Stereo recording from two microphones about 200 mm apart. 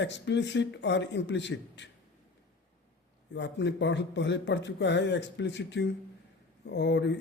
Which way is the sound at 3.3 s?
60° left (ahead or behind).